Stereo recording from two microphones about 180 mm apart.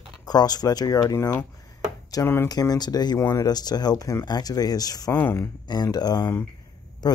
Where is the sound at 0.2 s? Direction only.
20° left (ahead or behind).